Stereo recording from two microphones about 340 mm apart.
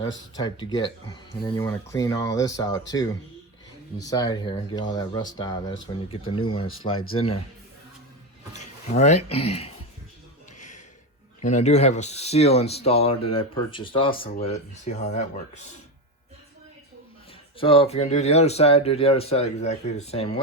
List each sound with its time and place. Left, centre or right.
0.3 s speech: centre
8.5 s speech: centre
11.3 s speech: centre
17.6 s speech: centre